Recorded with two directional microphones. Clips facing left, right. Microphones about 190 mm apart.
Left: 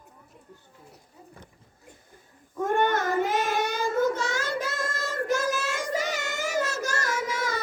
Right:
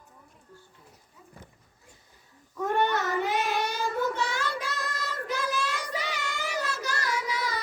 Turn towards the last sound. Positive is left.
turn(degrees=45)  # may be behind; listen again after turning